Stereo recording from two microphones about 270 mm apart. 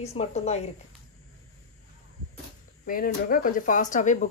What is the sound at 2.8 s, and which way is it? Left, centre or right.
A woman's voice, left.